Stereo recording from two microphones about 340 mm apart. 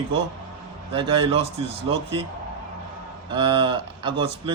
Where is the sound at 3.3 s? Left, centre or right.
Centre.